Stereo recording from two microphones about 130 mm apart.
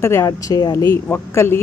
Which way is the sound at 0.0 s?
25° left (ahead or behind).